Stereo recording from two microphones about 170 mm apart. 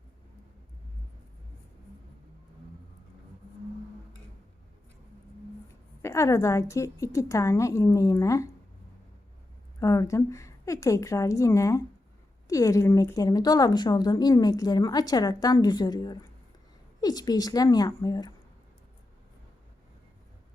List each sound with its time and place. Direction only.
6.0 s a woman's voice: 15° left (ahead or behind)
9.8 s a woman's voice: 20° left (ahead or behind)